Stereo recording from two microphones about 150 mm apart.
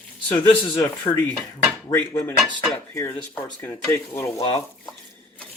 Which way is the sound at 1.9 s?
15° left (ahead or behind).